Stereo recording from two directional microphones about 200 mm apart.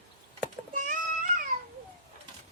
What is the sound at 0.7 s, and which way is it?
Music, 40° right (ahead or behind).